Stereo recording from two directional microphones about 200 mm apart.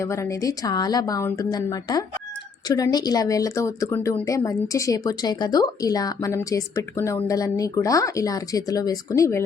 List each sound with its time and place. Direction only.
0.0 s speech: 15° left (ahead or behind)